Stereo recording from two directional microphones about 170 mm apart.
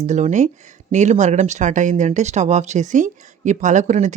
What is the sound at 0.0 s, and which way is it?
Speech, 45° right (ahead or behind).